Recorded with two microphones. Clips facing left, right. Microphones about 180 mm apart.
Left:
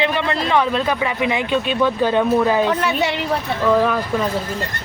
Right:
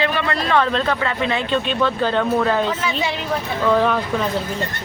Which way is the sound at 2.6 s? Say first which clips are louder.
Left 3 dB; 65° left (ahead or behind).